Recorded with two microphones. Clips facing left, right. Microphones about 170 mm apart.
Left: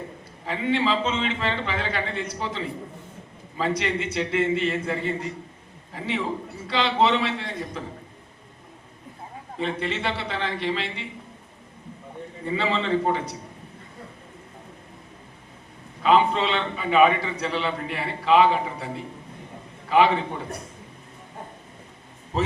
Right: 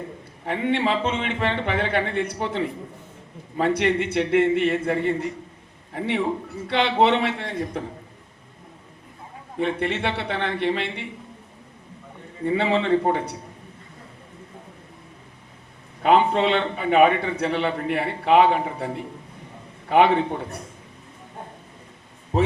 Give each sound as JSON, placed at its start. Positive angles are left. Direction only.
{"t": 0.4, "sound": "a man's voice", "side_deg": -60}
{"t": 9.6, "sound": "a man's voice", "side_deg": -60}
{"t": 12.5, "sound": "a man's voice", "side_deg": -60}
{"t": 16.0, "sound": "a man's voice", "side_deg": -60}